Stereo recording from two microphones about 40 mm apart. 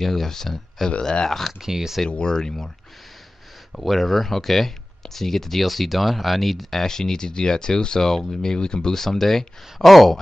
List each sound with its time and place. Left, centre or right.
0.0 s speech: centre
1.6 s speech: centre
2.0 s speech: left
3.7 s speech: centre